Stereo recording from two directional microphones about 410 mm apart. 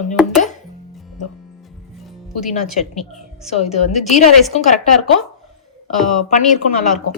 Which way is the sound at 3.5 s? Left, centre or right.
Centre.